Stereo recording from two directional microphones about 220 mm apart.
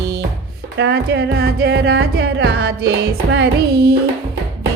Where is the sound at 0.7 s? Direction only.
50° right (ahead or behind).